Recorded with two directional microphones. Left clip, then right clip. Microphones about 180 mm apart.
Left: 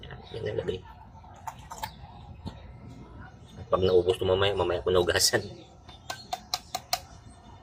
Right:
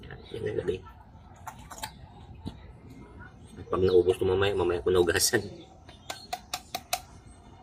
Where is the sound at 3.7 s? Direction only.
15° right (ahead or behind).